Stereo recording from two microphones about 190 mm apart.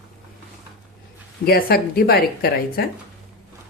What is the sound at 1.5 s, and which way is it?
A woman's voice, 55° left (ahead or behind).